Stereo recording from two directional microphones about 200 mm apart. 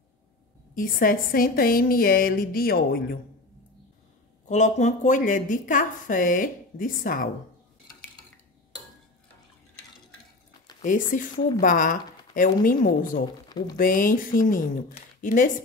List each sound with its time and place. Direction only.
0.7 s a woman's voice: 45° left (ahead or behind)
4.5 s a woman's voice: 35° left (ahead or behind)
10.8 s a woman's voice: 40° left (ahead or behind)
13.5 s a sound: 20° left (ahead or behind)
13.7 s a woman's voice: 45° left (ahead or behind)